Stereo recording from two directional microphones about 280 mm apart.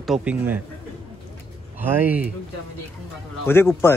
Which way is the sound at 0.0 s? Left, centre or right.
Centre.